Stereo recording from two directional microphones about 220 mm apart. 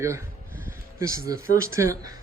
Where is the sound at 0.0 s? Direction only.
10° right (ahead or behind).